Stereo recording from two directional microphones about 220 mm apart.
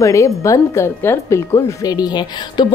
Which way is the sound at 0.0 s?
15° left (ahead or behind).